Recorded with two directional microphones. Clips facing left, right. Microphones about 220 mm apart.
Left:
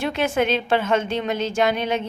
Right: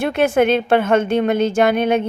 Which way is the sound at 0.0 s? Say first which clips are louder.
Right 6 dB; 55° right (ahead or behind).